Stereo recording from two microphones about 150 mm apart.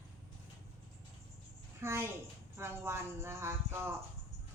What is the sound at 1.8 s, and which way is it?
A child's voice, 15° right (ahead or behind).